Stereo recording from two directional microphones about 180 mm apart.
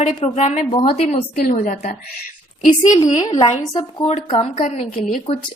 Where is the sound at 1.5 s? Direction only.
50° left (ahead or behind).